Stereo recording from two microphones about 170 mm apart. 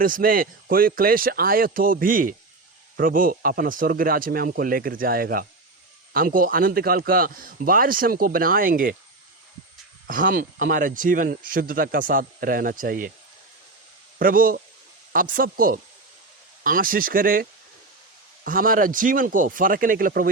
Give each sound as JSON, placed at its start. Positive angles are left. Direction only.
{"t": 0.0, "sound": "speech", "side_deg": -55}
{"t": 10.1, "sound": "speech", "side_deg": -55}
{"t": 14.2, "sound": "speech", "side_deg": -55}
{"t": 18.4, "sound": "speech", "side_deg": -55}